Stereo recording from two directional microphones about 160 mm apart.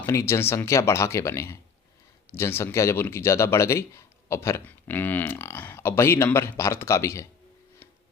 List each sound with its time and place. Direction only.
0.0 s speech: 15° left (ahead or behind)